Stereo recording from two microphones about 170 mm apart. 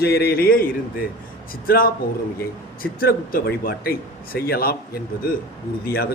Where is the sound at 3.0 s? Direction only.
60° left (ahead or behind).